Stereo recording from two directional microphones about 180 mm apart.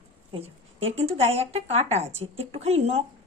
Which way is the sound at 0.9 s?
35° right (ahead or behind).